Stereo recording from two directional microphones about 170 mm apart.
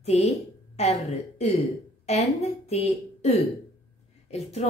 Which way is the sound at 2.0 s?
40° left (ahead or behind).